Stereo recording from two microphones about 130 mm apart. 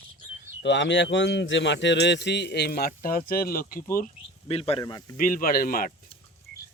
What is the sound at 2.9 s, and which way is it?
Speech, 90° left.